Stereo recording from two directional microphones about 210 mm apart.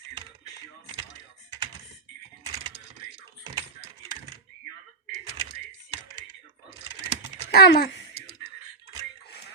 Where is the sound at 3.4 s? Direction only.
20° right (ahead or behind).